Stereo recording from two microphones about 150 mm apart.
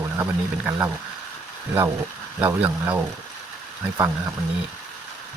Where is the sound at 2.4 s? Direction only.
10° right (ahead or behind).